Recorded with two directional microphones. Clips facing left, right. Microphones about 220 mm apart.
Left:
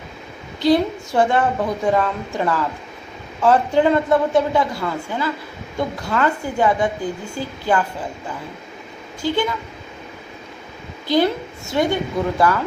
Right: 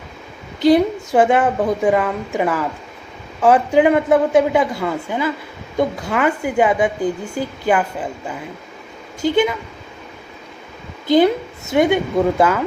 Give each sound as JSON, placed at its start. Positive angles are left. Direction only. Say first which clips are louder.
{"t": 0.6, "sound": "a woman's voice", "louder": "right 3 dB", "side_deg": -20}
{"t": 9.2, "sound": "a woman's voice", "louder": "right 5 dB", "side_deg": -20}
{"t": 11.1, "sound": "a woman's voice", "louder": "right 4 dB", "side_deg": -20}